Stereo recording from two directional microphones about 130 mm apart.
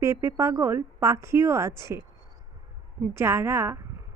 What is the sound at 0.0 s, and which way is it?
A woman's voice, 20° right (ahead or behind).